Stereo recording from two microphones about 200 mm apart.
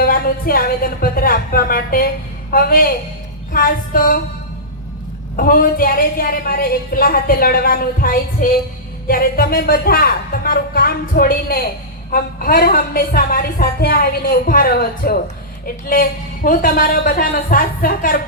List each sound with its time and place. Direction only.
0.0 s a woman's voice: 45° left (ahead or behind)
5.4 s a woman's voice: 45° left (ahead or behind)